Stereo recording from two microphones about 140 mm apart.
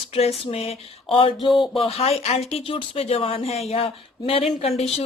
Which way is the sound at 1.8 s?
45° left (ahead or behind).